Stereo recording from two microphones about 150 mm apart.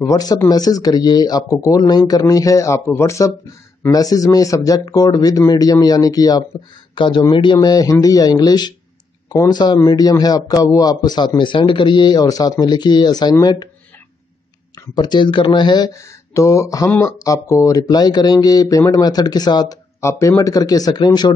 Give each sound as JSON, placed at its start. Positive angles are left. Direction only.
{"t": 0.0, "sound": "speech", "side_deg": 25}
{"t": 15.0, "sound": "speech", "side_deg": 30}